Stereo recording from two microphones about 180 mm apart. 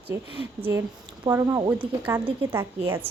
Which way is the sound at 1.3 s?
15° right (ahead or behind).